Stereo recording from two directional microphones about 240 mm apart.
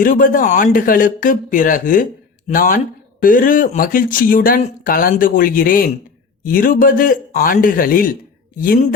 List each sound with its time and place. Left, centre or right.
0.0 s speech: left